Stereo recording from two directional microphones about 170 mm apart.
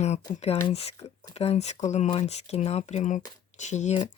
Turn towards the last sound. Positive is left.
turn(degrees=40)  # may be behind; listen again after turning